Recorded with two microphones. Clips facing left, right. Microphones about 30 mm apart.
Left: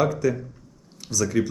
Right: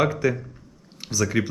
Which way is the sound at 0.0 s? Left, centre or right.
Right.